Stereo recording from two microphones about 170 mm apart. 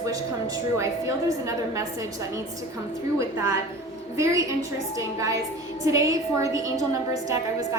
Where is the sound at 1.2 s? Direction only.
20° right (ahead or behind).